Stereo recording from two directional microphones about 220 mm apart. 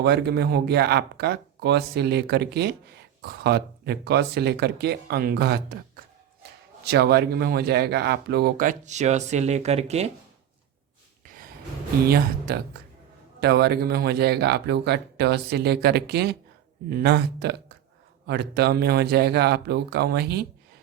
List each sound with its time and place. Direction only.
0.0 s speech: 50° right (ahead or behind)
6.8 s speech: 45° right (ahead or behind); by 10.1 s 30° right (ahead or behind)
12.0 s speech: 45° right (ahead or behind)